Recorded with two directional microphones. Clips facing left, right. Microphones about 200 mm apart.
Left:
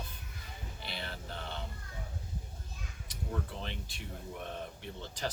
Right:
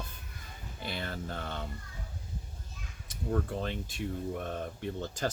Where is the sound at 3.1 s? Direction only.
45° right (ahead or behind).